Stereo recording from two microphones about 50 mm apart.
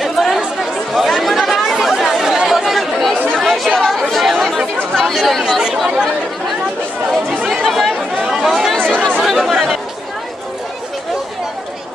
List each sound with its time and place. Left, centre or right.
0.0 s chatter: centre
7.6 s chatter: centre
8.3 s chatter: centre
8.7 s chatter: centre
9.2 s chatter: centre